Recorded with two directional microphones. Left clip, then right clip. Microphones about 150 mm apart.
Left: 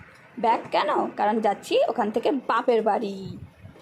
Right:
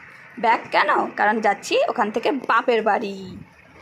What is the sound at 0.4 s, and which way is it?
A woman's voice, 15° left (ahead or behind).